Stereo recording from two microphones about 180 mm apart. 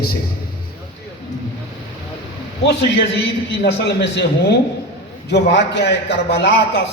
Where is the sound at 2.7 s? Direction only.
70° left (ahead or behind).